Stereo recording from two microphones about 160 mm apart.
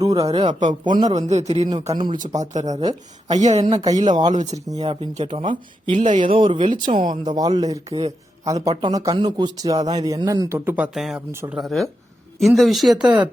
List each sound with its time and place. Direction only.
0.0 s speech: 25° right (ahead or behind)
0.3 s a man's voice: 40° right (ahead or behind)
0.9 s speech: 25° right (ahead or behind)
1.1 s a man's voice: 45° right (ahead or behind)
1.9 s speech: 25° right (ahead or behind)
2.4 s a man's voice: 45° right (ahead or behind)
3.6 s speech: 25° right (ahead or behind)
4.4 s a man's voice: 45° right (ahead or behind)
6.0 s a man's voice: 50° right (ahead or behind)
6.2 s speech: 30° right (ahead or behind); by 11.2 s centre (ahead or behind)
11.3 s speech: 15° right (ahead or behind)
11.5 s speech: centre (ahead or behind)
13.0 s speech: 30° right (ahead or behind)